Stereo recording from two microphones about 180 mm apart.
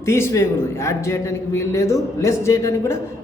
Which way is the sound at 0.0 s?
15° left (ahead or behind).